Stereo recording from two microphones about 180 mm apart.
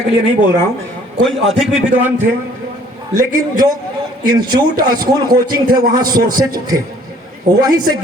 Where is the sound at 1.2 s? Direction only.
Centre (ahead or behind).